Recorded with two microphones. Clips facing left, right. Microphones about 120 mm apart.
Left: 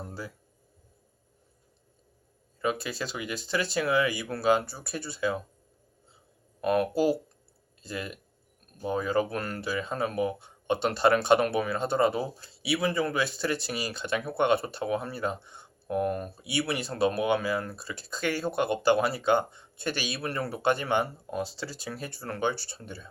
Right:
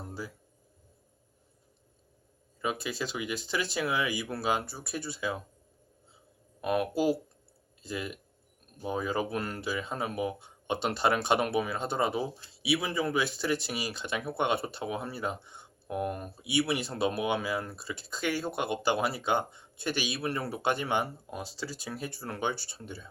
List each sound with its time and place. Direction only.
2.6 s speech: 10° right (ahead or behind)
6.6 s speech: 10° right (ahead or behind)